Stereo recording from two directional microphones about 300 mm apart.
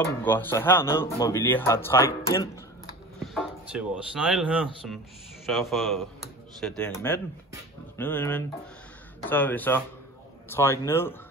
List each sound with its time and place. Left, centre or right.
0.0 s speech: centre
3.3 s a man's voice: centre